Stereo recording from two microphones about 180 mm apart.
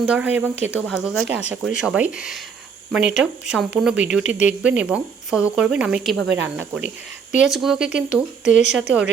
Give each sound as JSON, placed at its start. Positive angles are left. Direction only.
{"t": 0.0, "sound": "speech", "side_deg": -5}
{"t": 6.1, "sound": "speech", "side_deg": -85}
{"t": 6.6, "sound": "speech", "side_deg": -5}